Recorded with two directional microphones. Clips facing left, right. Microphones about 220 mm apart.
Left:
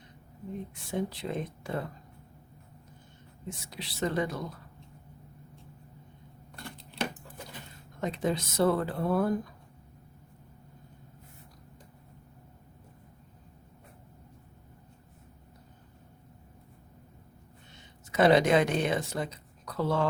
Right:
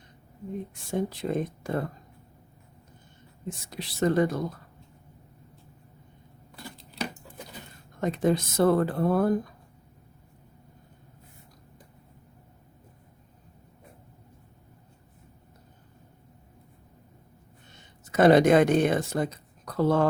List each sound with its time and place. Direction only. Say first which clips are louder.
0.9 s speech: right 4 dB; 45° right (ahead or behind)
3.7 s speech: right 7 dB; 45° right (ahead or behind)
6.6 s a sound: right 1 dB; 5° right (ahead or behind)
8.0 s speech: right 6 dB; 50° right (ahead or behind)
18.1 s speech: right 4 dB; 50° right (ahead or behind)